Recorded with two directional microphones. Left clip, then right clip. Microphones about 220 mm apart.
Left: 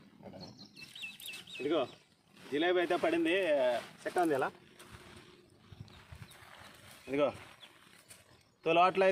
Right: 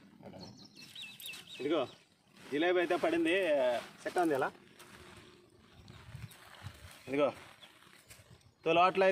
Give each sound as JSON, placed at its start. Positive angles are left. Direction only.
{"t": 1.6, "sound": "speech", "side_deg": -5}
{"t": 7.0, "sound": "speech", "side_deg": -15}
{"t": 8.6, "sound": "speech", "side_deg": 0}